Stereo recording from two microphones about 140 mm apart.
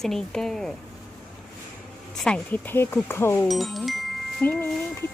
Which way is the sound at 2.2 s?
5° left (ahead or behind).